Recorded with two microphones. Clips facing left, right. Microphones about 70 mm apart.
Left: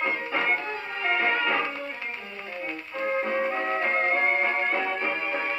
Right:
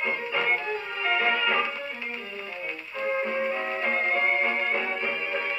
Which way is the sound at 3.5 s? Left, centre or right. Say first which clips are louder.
Left 2 dB; left.